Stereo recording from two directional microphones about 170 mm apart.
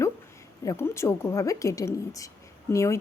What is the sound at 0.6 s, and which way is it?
A woman's voice, 20° left (ahead or behind).